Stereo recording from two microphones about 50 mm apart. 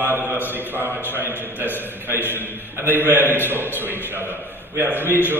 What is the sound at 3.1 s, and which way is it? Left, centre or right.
Mantra, right.